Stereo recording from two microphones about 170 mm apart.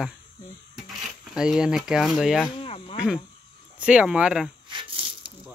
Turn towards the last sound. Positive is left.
turn(degrees=-30)  # may be behind; listen again after turning